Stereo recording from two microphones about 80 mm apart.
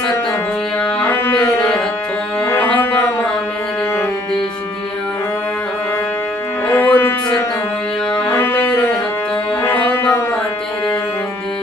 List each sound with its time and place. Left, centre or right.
1.0 s music: left
6.7 s music: left